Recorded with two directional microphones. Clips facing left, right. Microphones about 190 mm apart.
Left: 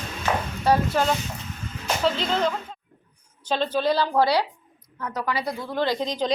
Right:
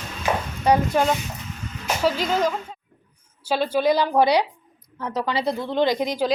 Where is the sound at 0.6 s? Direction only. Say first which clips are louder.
Right 2 dB; 15° right (ahead or behind).